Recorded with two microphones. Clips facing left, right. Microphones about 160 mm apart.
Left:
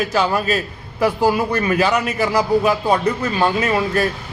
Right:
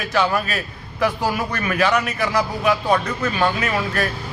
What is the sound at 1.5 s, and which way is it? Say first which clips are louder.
A man's voice: left 3 dB; 30° left (ahead or behind).